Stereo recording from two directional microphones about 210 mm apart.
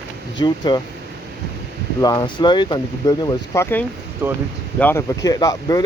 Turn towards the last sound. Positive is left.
turn(degrees=15)  # may be behind; listen again after turning